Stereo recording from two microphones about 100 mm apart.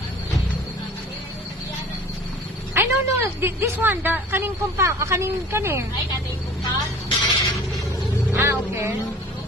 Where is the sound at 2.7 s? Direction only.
25° right (ahead or behind).